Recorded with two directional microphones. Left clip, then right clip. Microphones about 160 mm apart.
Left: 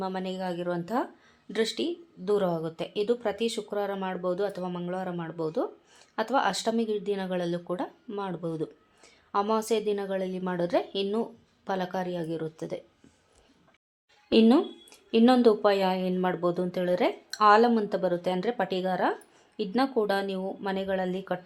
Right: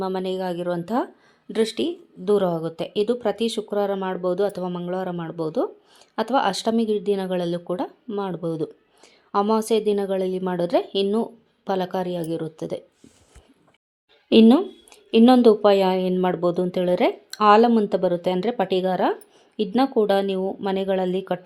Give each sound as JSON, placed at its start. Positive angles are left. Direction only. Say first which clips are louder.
{"t": 0.0, "sound": "speech", "louder": "right 7 dB", "side_deg": -40}
{"t": 14.3, "sound": "speech", "louder": "right 6 dB", "side_deg": -45}